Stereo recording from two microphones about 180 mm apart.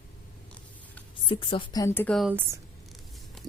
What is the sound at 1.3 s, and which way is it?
Speech, 30° left (ahead or behind).